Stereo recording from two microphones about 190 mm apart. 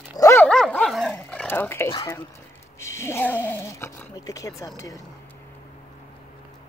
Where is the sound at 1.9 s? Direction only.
15° left (ahead or behind).